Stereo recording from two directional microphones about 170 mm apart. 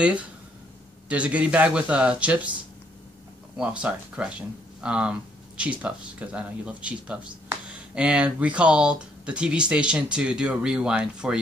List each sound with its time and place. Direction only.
1.0 s speech: 5° right (ahead or behind)
3.5 s speech: 5° right (ahead or behind)